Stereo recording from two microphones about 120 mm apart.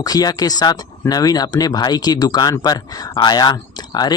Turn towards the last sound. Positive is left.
turn(degrees=35)  # may be behind; listen again after turning